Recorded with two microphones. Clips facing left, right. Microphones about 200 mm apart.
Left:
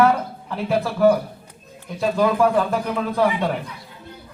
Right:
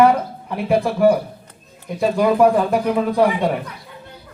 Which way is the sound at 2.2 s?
15° right (ahead or behind).